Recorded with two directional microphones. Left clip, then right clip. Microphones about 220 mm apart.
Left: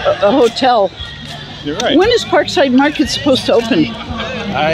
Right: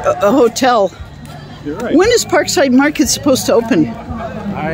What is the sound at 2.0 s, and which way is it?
Speech, 15° right (ahead or behind).